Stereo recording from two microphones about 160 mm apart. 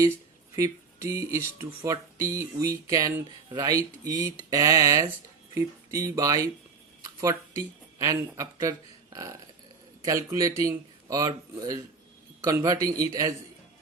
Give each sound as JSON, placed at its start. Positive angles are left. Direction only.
{"t": 0.5, "sound": "speech", "side_deg": -20}
{"t": 10.0, "sound": "speech", "side_deg": -20}